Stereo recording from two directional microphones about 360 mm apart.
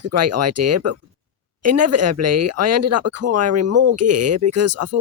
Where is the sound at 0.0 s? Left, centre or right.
Right.